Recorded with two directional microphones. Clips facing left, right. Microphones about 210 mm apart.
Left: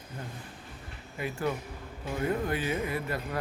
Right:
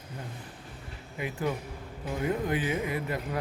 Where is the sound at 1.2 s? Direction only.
15° right (ahead or behind).